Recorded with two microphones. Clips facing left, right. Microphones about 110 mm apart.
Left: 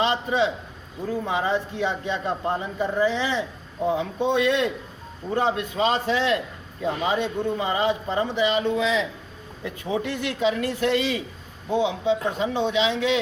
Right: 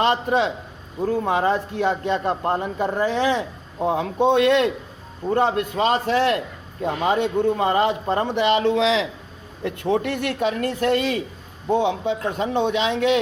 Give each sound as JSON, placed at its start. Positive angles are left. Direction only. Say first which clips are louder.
{"t": 0.0, "sound": "a man's voice", "louder": "right 3 dB", "side_deg": -55}
{"t": 9.6, "sound": "speech", "louder": "right 5 dB", "side_deg": -60}